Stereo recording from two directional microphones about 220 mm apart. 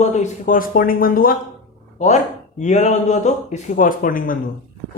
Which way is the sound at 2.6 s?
30° left (ahead or behind).